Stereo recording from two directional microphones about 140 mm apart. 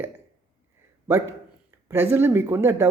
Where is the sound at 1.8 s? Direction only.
15° right (ahead or behind).